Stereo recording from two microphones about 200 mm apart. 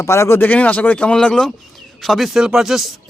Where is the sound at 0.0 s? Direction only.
15° left (ahead or behind).